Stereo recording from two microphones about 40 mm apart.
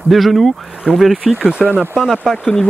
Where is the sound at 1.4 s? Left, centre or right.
Right.